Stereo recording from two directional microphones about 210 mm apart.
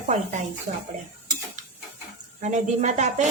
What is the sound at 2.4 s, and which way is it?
Speech, 35° right (ahead or behind).